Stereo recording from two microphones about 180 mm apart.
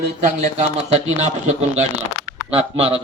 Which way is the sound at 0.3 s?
40° right (ahead or behind).